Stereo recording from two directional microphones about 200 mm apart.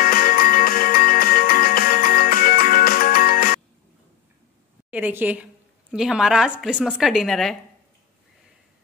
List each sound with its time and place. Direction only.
0.0 s music: 45° left (ahead or behind)
4.9 s a woman's voice: 10° right (ahead or behind)